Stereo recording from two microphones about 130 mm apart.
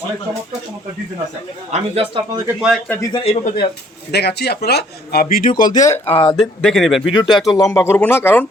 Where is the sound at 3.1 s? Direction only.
50° left (ahead or behind).